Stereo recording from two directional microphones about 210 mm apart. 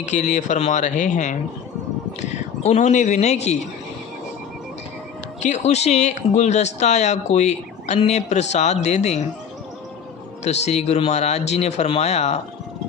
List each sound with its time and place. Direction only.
0.0 s a man's voice: 35° left (ahead or behind)
5.4 s speech: 30° left (ahead or behind)
10.4 s speech: 30° left (ahead or behind)